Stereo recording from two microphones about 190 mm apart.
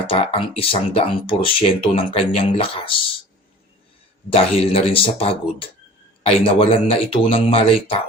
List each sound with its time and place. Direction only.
0.1 s speech: 30° left (ahead or behind)
4.3 s speech: 30° left (ahead or behind)